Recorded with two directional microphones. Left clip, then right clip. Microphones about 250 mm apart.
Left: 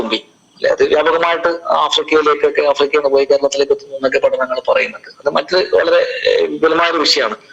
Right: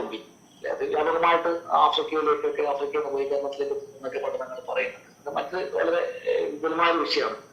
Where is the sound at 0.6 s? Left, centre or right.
Left.